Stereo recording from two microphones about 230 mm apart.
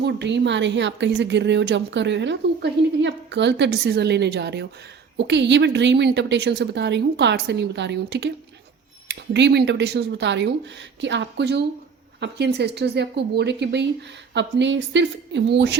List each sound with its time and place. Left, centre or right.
0.0 s a woman's voice: right